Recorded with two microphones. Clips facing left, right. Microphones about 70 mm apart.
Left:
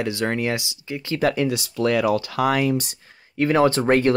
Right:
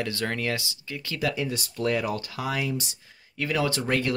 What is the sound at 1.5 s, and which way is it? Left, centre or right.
Speech, left.